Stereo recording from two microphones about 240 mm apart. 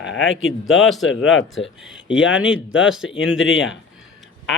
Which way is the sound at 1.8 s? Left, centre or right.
Centre.